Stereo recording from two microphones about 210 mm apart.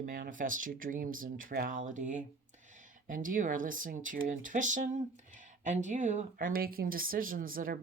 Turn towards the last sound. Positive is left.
turn(degrees=-40)  # may be behind; listen again after turning